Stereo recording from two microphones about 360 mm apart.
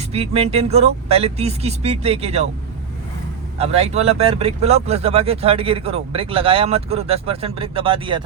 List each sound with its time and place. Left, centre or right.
0.0 s speech: centre
3.6 s speech: centre